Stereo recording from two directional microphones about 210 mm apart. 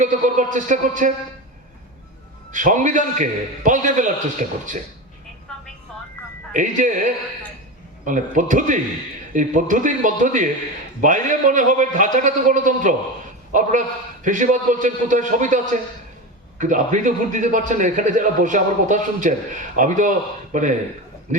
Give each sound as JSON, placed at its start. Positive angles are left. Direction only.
{"t": 0.0, "sound": "a man's voice", "side_deg": -35}
{"t": 2.5, "sound": "a man's voice", "side_deg": -35}
{"t": 6.5, "sound": "a man's voice", "side_deg": -35}